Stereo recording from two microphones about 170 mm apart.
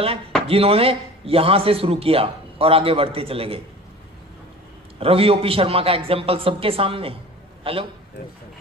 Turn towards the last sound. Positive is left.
turn(degrees=-30)  # may be behind; listen again after turning